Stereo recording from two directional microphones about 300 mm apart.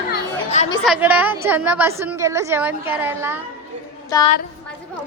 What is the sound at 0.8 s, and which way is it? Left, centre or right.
A woman's voice, centre.